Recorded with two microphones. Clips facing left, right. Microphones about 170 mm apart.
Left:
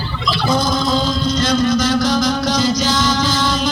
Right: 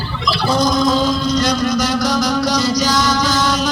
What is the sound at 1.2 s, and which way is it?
Vehicle, 40° right (ahead or behind).